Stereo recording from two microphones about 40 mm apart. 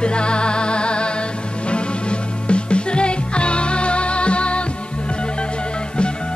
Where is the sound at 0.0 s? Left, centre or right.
Left.